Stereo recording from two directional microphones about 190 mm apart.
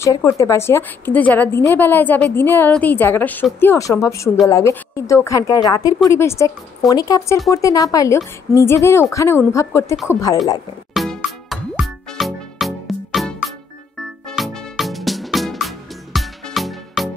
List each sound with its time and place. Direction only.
0.0 s a woman's voice: 15° left (ahead or behind)
10.9 s music: centre (ahead or behind)